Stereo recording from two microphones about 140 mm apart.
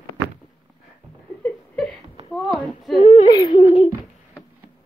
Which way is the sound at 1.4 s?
10° left (ahead or behind).